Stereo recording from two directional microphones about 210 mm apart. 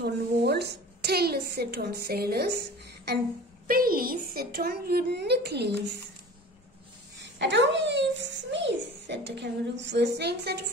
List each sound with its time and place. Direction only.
0.0 s a woman's voice: 50° right (ahead or behind)
3.6 s a woman's voice: 45° right (ahead or behind)
7.2 s a child's voice: 55° right (ahead or behind)